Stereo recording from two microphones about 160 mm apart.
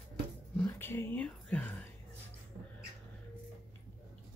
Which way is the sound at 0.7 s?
15° left (ahead or behind).